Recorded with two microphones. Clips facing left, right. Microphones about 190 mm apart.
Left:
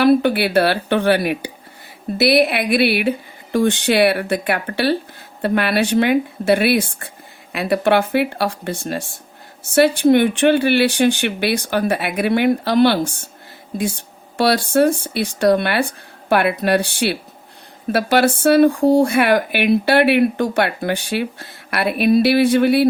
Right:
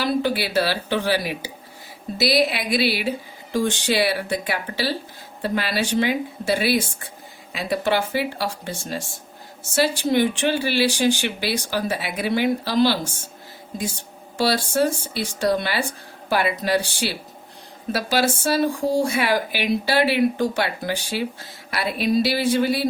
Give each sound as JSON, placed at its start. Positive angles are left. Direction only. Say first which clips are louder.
{"t": 0.0, "sound": "speech", "louder": "left 8 dB", "side_deg": 60}
{"t": 14.3, "sound": "speech", "louder": "left 5 dB", "side_deg": 60}